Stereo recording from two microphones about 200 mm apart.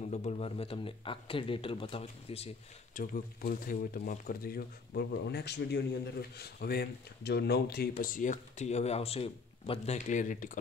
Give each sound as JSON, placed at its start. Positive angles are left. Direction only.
{"t": 0.0, "sound": "speech", "side_deg": 35}
{"t": 8.0, "sound": "speech", "side_deg": 40}